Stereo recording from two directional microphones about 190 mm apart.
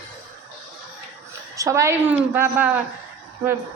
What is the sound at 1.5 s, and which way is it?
A man's voice, 15° right (ahead or behind).